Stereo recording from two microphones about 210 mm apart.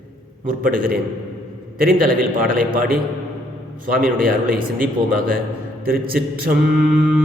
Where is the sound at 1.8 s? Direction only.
40° right (ahead or behind).